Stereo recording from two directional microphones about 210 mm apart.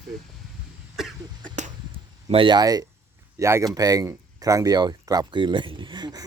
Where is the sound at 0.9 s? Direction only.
Centre (ahead or behind).